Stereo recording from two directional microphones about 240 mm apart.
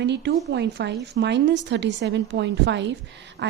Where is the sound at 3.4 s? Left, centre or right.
Right.